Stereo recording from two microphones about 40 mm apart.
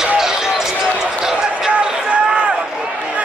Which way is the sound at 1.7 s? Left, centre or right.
Right.